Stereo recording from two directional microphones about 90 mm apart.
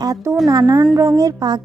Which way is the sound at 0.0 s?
40° right (ahead or behind).